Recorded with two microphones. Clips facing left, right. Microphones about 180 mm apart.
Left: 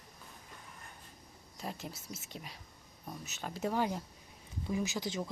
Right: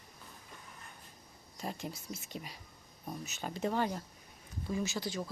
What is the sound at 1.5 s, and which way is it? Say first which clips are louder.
A woman's voice: right 2 dB; centre (ahead or behind).